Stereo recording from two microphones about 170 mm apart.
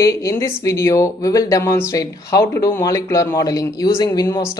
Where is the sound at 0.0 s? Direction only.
20° left (ahead or behind).